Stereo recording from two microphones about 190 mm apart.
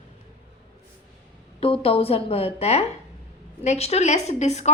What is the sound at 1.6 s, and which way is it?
A woman's voice, 30° left (ahead or behind).